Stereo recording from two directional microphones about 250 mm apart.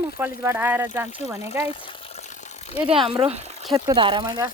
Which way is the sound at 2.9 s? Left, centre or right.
Right.